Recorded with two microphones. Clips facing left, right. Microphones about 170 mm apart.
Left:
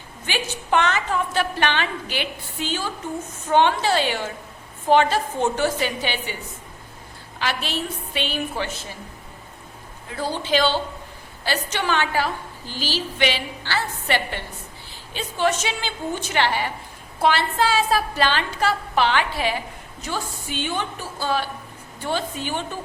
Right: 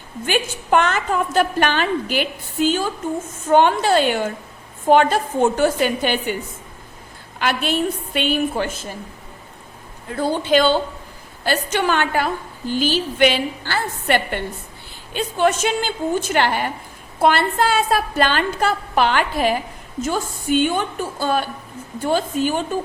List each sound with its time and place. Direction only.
0.3 s a woman's voice: 50° right (ahead or behind)
7.3 s a woman's voice: 55° right (ahead or behind)
10.2 s a woman's voice: 50° right (ahead or behind)